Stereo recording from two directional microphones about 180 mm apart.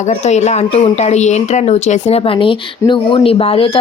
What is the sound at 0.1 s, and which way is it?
Speech, 40° left (ahead or behind).